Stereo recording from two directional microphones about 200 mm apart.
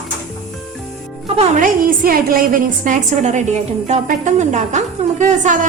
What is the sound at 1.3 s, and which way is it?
A woman's voice, 40° right (ahead or behind).